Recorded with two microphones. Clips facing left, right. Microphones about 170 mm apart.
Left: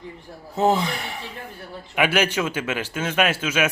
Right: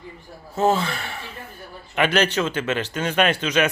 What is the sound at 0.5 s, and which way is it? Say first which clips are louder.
A man's voice: even; 15° left (ahead or behind).